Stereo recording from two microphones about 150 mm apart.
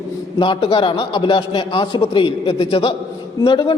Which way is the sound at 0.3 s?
35° left (ahead or behind).